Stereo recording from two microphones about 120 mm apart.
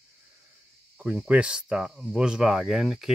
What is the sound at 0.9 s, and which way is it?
Speech, 10° right (ahead or behind).